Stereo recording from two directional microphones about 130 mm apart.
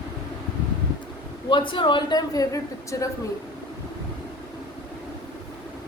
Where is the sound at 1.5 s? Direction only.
40° left (ahead or behind).